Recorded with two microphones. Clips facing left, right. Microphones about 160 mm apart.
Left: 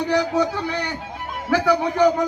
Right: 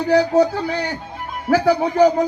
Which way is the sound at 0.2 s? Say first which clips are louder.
Right 5 dB; 35° right (ahead or behind).